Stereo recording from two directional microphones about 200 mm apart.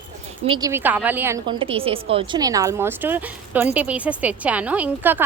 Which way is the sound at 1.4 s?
25° right (ahead or behind).